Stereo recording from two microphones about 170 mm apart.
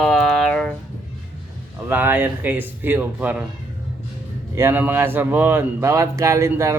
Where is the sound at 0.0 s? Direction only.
5° left (ahead or behind).